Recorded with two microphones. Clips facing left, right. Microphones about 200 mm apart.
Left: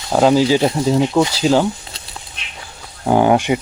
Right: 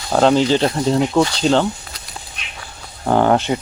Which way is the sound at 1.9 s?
30° left (ahead or behind).